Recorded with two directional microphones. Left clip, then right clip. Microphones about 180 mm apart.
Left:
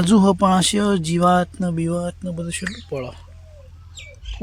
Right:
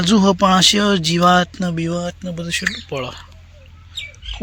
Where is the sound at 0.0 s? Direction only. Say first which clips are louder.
Right 2 dB; 15° left (ahead or behind); by 3.2 s centre (ahead or behind).